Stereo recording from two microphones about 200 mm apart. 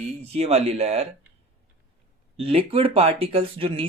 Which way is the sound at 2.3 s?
30° right (ahead or behind).